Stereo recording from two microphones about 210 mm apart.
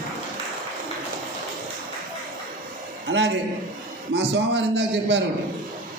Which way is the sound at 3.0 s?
60° right (ahead or behind).